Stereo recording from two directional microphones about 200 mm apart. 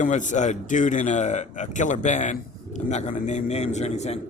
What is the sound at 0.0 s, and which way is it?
A man's voice, 40° left (ahead or behind).